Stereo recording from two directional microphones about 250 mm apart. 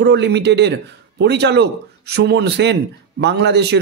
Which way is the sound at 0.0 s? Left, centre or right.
Right.